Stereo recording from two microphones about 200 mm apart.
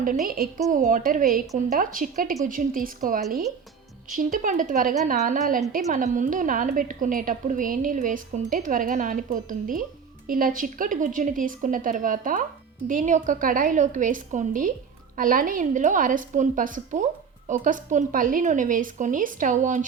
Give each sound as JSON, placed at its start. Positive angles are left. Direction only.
{"t": 0.3, "sound": "a woman's voice", "side_deg": -45}